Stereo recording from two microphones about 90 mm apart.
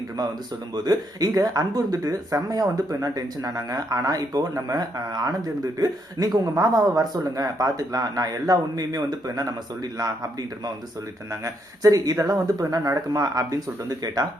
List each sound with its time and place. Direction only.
0.9 s speech: 45° right (ahead or behind)
11.4 s speech: 40° right (ahead or behind)